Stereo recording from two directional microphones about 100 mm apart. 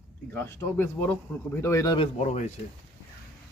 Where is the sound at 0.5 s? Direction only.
20° left (ahead or behind).